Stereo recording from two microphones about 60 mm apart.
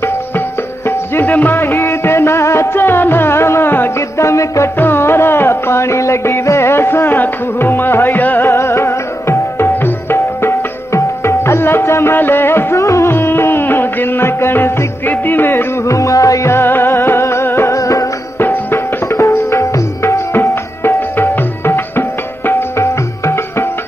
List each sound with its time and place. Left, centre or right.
0.0 s music: left
3.9 s music: left
4.8 s music: left
8.5 s tabla: left
12.2 s music: left
12.7 s music: left
18.4 s music: left